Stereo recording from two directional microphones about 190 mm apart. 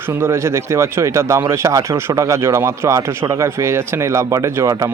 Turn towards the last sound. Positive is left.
turn(degrees=-15)  # may be behind; listen again after turning